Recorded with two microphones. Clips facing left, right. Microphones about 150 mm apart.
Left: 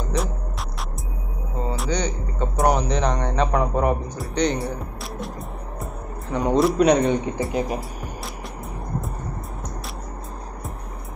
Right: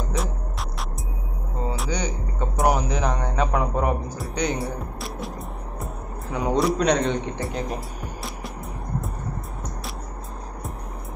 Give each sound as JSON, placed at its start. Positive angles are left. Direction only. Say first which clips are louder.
{"t": 0.2, "sound": "music", "louder": "left 3 dB", "side_deg": 0}
{"t": 1.7, "sound": "music", "louder": "left 3 dB", "side_deg": -10}
{"t": 6.3, "sound": "speech", "louder": "left 3 dB", "side_deg": 0}